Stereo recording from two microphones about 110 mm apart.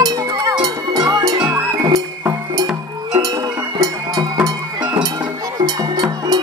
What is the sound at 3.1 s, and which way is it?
Music, 35° right (ahead or behind).